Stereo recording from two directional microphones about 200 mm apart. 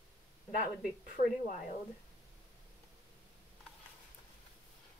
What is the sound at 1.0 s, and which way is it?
Speech, 40° left (ahead or behind).